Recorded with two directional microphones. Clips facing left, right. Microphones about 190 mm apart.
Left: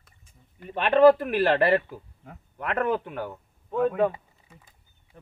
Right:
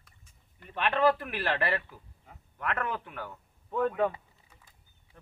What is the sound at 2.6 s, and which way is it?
Speech, 30° left (ahead or behind).